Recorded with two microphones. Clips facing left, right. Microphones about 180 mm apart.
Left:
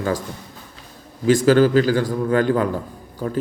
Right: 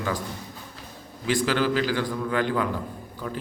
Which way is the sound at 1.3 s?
45° left (ahead or behind).